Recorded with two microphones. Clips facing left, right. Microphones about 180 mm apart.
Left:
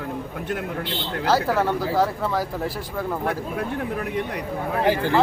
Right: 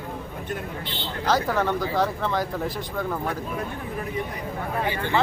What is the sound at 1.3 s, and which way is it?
Speech, 5° left (ahead or behind).